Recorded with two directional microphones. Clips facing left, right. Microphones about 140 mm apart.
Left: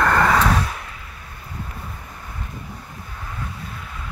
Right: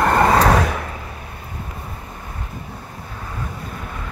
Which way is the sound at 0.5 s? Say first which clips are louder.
Right 6 dB; 80° right.